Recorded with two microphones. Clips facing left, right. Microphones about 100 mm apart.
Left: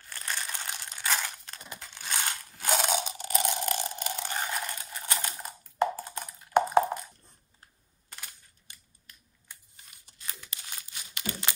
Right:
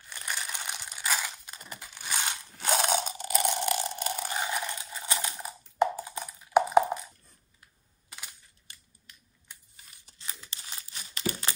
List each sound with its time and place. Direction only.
0.0 s crumpling: 15° right (ahead or behind)
1.3 s crushing: 10° right (ahead or behind)
2.7 s a sound: centre (ahead or behind)
4.1 s a sound: 10° right (ahead or behind)
4.6 s typing: 15° right (ahead or behind)
8.1 s computer keyboard: 15° right (ahead or behind)
10.1 s crumpling: 30° right (ahead or behind)